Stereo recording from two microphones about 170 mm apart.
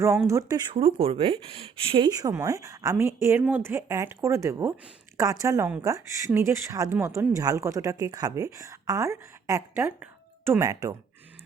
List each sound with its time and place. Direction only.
0.3 s speech: 20° right (ahead or behind)